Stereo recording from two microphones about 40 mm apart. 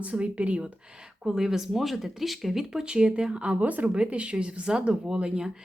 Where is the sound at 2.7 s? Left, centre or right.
Right.